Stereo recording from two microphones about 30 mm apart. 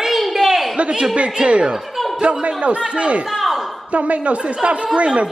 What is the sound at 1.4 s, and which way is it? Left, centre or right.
Speech, centre.